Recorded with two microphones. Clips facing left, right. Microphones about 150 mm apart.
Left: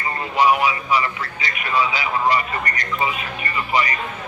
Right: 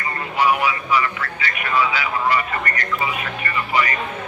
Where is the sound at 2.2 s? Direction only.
15° left (ahead or behind).